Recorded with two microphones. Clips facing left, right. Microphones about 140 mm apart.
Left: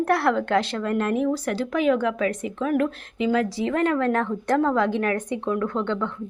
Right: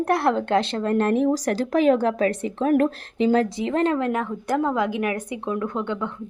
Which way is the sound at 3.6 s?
25° right (ahead or behind).